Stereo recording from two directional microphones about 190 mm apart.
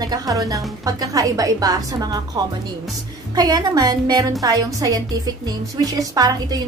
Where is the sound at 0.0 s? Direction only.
20° right (ahead or behind).